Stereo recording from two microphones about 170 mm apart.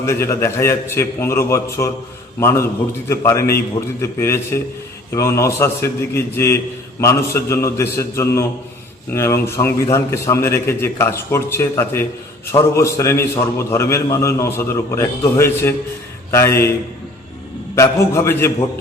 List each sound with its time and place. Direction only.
0.0 s a man's voice: 15° left (ahead or behind)
17.7 s a man's voice: 15° left (ahead or behind)